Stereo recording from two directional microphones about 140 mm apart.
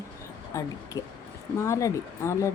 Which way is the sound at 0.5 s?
20° left (ahead or behind).